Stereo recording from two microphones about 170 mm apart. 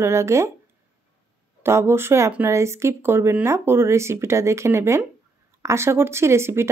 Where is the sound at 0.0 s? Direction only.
15° right (ahead or behind).